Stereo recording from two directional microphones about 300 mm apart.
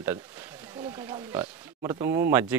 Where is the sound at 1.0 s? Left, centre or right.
Centre.